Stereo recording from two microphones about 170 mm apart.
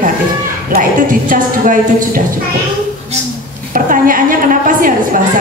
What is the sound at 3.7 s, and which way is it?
A woman's voice, 55° right (ahead or behind).